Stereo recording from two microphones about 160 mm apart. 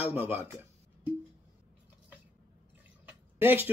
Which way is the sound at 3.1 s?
10° right (ahead or behind).